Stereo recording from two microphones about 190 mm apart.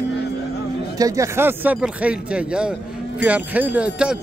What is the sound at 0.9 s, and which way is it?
Speech, 15° right (ahead or behind).